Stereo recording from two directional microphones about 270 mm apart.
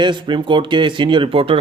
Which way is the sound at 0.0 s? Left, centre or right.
Centre.